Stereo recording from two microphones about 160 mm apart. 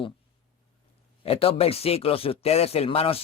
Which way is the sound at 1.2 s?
35° left (ahead or behind).